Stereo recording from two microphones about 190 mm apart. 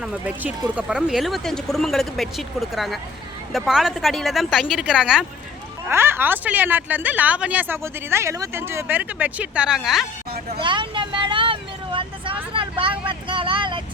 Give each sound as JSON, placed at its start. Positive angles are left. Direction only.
{"t": 0.0, "sound": "speech", "side_deg": -5}
{"t": 10.5, "sound": "vehicle", "side_deg": -25}
{"t": 12.5, "sound": "speech", "side_deg": -30}